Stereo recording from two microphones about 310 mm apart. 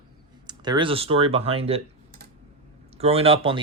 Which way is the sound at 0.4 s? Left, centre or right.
Centre.